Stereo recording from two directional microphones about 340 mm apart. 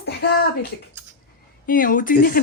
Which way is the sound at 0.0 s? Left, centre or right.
Left.